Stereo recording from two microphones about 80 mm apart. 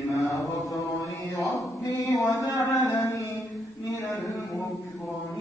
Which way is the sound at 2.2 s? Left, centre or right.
Left.